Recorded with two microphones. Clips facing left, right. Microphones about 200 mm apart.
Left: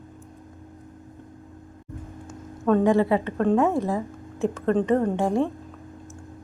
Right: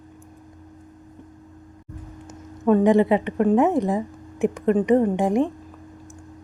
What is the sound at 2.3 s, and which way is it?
A woman's voice, 15° right (ahead or behind).